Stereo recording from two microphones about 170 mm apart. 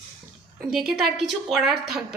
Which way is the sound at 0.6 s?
5° right (ahead or behind).